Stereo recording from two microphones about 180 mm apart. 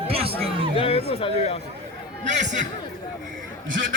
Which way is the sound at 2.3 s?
40° right (ahead or behind).